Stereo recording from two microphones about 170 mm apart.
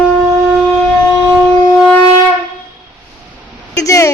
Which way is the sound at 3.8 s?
20° left (ahead or behind).